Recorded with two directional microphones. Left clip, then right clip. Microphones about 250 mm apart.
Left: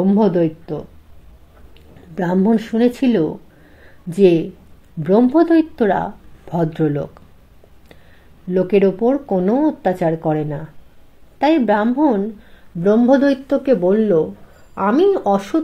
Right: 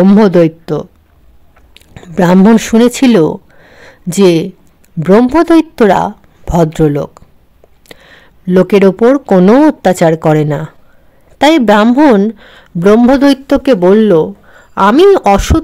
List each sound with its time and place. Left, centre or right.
0.0 s a woman's voice: right